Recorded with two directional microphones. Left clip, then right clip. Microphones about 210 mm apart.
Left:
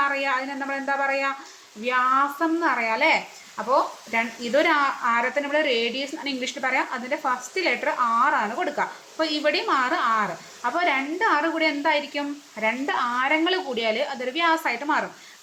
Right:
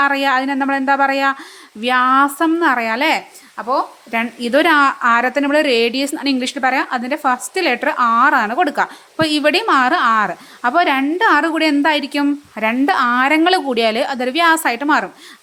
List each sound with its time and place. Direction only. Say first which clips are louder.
0.0 s speech: right 9 dB; 55° right (ahead or behind)
3.6 s speech: right 3 dB; 40° right (ahead or behind)